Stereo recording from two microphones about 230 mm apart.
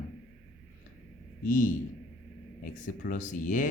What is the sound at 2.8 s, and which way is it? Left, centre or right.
Speech, left.